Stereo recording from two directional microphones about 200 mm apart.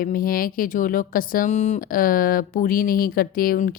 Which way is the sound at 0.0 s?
45° left (ahead or behind).